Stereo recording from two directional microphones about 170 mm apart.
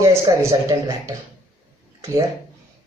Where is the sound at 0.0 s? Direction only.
20° right (ahead or behind).